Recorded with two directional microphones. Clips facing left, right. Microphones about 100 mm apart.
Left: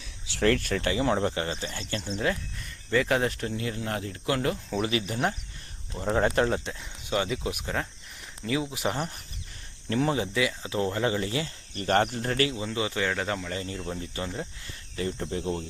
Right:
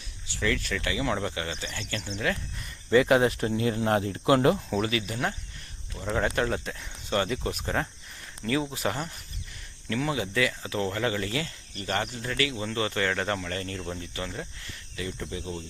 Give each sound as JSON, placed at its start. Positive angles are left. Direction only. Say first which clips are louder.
{"t": 0.4, "sound": "speech", "louder": "left 4 dB", "side_deg": 50}
{"t": 2.9, "sound": "speech", "louder": "right 4 dB", "side_deg": -10}
{"t": 3.4, "sound": "speech", "louder": "right 5 dB", "side_deg": -25}
{"t": 4.9, "sound": "speech", "louder": "left 2 dB", "side_deg": 30}
{"t": 7.1, "sound": "speech", "louder": "right 1 dB", "side_deg": 10}
{"t": 7.6, "sound": "speech", "louder": "right 2 dB", "side_deg": 0}
{"t": 8.7, "sound": "speech", "louder": "even", "side_deg": 20}
{"t": 9.9, "sound": "speech", "louder": "left 3 dB", "side_deg": 35}
{"t": 10.3, "sound": "speech", "louder": "even", "side_deg": 20}
{"t": 11.8, "sound": "speech", "louder": "left 6 dB", "side_deg": 45}
{"t": 12.5, "sound": "speech", "louder": "even", "side_deg": 10}
{"t": 14.9, "sound": "speech", "louder": "left 4 dB", "side_deg": 40}
{"t": 15.4, "sound": "speech", "louder": "left 5 dB", "side_deg": 55}